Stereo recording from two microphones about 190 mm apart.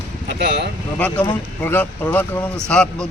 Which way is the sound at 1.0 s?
10° left (ahead or behind).